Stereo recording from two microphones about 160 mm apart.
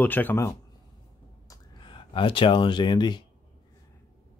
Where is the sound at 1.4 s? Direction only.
30° left (ahead or behind).